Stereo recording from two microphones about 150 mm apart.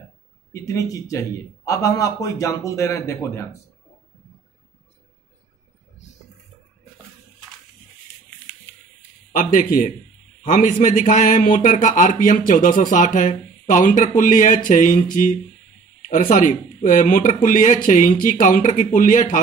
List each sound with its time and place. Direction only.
0.5 s a man's voice: 20° left (ahead or behind)
9.3 s speech: 65° left (ahead or behind)
16.1 s speech: 60° left (ahead or behind)